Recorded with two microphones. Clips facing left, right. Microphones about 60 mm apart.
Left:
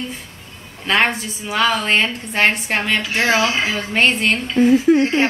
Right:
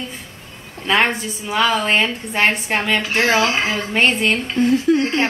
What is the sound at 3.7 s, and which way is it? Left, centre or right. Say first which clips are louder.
Speech: even; centre.